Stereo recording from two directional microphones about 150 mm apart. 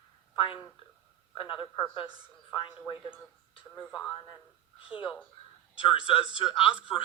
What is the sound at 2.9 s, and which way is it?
A woman's voice, 10° left (ahead or behind).